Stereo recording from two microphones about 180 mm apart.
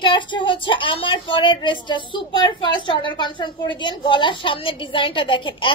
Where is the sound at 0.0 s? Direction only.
25° left (ahead or behind).